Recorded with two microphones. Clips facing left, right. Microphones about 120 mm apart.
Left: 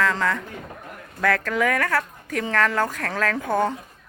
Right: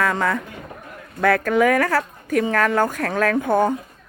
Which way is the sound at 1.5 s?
25° right (ahead or behind).